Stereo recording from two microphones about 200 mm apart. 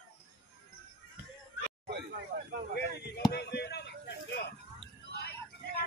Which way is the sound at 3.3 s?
55° left (ahead or behind).